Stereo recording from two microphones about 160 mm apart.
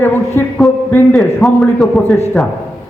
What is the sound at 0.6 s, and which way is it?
A man's voice, 5° left (ahead or behind).